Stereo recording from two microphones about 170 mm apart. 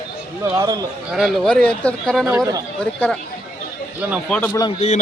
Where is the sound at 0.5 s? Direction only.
20° right (ahead or behind).